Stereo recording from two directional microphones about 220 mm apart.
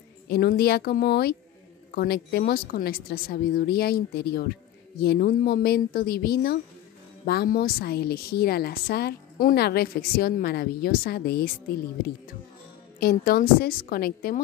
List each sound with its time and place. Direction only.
0.3 s a woman's voice: 45° left (ahead or behind)
13.0 s a woman's voice: 40° left (ahead or behind)